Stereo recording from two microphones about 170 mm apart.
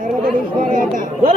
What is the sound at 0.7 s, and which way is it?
Speech, 55° right (ahead or behind).